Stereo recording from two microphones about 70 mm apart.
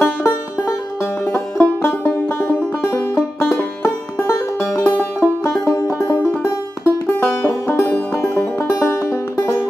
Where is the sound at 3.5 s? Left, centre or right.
Left.